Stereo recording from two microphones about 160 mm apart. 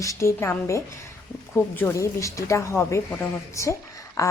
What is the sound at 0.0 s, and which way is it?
Speech, 20° left (ahead or behind).